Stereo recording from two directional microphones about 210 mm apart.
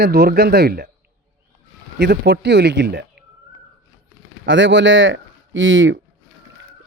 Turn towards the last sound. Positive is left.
turn(degrees=-65)  # may be behind; listen again after turning